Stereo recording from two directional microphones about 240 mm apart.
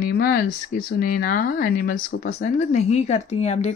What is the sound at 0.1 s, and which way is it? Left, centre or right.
Speech, left.